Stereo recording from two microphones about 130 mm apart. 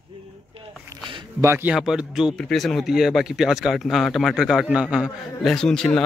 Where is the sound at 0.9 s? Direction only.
25° right (ahead or behind).